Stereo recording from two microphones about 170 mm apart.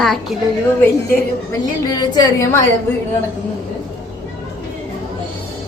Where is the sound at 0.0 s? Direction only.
Centre (ahead or behind).